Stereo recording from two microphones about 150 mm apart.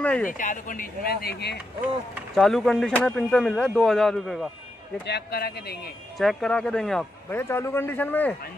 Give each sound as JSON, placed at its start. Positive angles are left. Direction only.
{"t": 0.0, "sound": "speech", "side_deg": 10}
{"t": 0.3, "sound": "speech", "side_deg": 60}
{"t": 2.3, "sound": "speech", "side_deg": 0}
{"t": 5.0, "sound": "a man's voice", "side_deg": 90}
{"t": 6.1, "sound": "speech", "side_deg": 0}
{"t": 7.2, "sound": "a man's voice", "side_deg": 15}